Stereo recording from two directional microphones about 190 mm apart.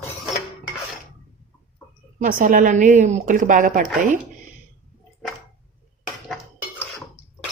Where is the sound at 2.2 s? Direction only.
45° right (ahead or behind).